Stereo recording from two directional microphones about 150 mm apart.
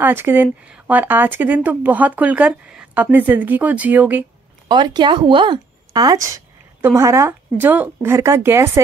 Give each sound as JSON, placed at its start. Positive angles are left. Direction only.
{"t": 0.0, "sound": "speech", "side_deg": -15}
{"t": 4.6, "sound": "speech", "side_deg": -30}